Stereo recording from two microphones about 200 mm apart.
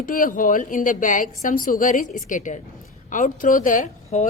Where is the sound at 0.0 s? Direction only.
45° left (ahead or behind).